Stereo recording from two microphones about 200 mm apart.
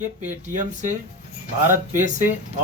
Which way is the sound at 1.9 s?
40° right (ahead or behind).